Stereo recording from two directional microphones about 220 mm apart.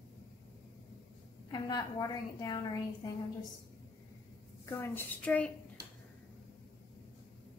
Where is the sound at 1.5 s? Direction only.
15° left (ahead or behind).